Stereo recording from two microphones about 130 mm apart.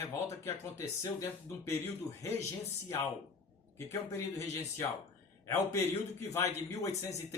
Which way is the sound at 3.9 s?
25° left (ahead or behind).